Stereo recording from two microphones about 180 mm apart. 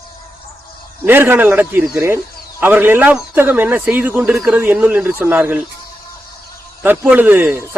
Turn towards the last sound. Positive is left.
turn(degrees=-15)  # may be behind; listen again after turning